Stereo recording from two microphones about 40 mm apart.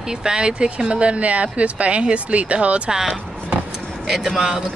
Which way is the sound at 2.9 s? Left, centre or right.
Centre.